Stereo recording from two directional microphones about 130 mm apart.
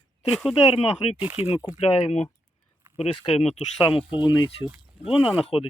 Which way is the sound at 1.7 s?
50° left (ahead or behind).